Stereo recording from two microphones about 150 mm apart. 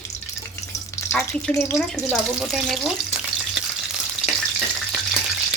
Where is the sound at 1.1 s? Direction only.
5° left (ahead or behind).